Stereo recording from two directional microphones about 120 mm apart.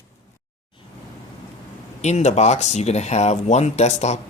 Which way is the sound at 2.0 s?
70° left (ahead or behind).